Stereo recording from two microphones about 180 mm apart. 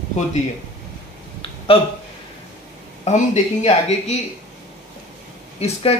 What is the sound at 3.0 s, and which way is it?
Speech, 40° left (ahead or behind).